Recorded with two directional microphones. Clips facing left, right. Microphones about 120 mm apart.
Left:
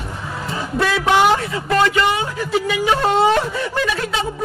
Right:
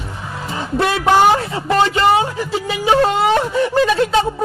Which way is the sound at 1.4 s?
30° right (ahead or behind).